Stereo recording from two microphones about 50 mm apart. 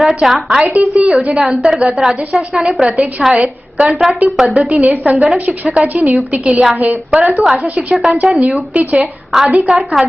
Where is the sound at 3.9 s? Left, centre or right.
Centre.